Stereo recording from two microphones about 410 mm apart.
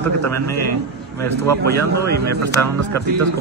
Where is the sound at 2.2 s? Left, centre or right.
Right.